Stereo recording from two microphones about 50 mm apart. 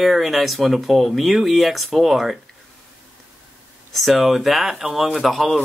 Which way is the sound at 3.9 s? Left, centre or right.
Centre.